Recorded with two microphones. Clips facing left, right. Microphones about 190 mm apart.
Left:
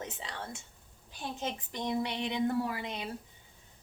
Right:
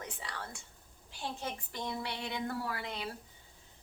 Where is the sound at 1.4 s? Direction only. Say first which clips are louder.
Left 3 dB; 20° left (ahead or behind).